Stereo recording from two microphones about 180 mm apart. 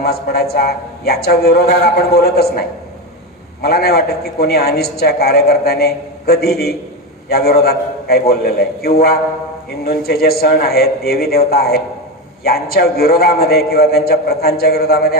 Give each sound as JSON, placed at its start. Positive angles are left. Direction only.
{"t": 0.0, "sound": "a man's voice", "side_deg": 60}